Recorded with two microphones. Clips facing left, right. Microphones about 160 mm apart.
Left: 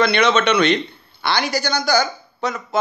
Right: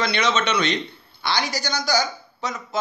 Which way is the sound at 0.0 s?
60° left (ahead or behind).